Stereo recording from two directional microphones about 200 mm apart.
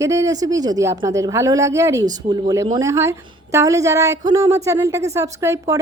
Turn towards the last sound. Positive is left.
turn(degrees=-15)  # may be behind; listen again after turning